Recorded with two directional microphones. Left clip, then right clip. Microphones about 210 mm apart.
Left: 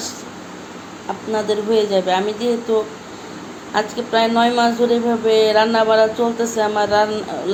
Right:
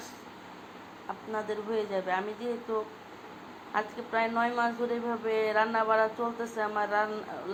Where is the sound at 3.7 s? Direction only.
10° left (ahead or behind).